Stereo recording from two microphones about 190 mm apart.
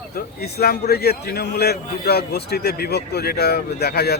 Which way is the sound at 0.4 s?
55° left (ahead or behind).